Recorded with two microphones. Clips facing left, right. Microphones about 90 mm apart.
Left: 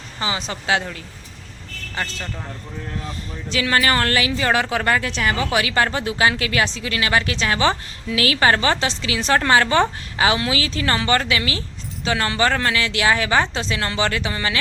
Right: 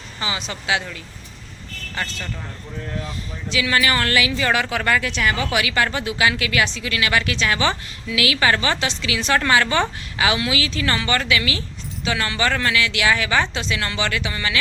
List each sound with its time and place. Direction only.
0.2 s a woman's voice: 30° left (ahead or behind)
2.0 s speech: 25° left (ahead or behind)
3.5 s a woman's voice: 40° left (ahead or behind)